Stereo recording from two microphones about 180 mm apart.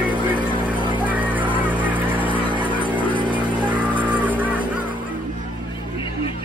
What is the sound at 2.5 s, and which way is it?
Music, 25° right (ahead or behind).